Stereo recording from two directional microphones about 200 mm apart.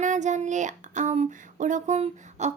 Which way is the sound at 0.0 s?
35° right (ahead or behind).